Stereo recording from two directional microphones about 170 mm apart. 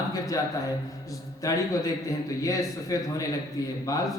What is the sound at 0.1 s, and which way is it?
A man's voice, 20° left (ahead or behind).